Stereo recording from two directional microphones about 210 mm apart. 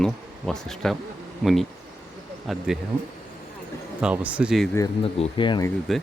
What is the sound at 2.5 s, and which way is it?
Speech, centre (ahead or behind).